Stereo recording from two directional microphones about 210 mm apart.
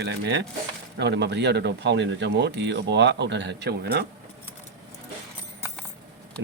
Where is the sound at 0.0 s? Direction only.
55° right (ahead or behind).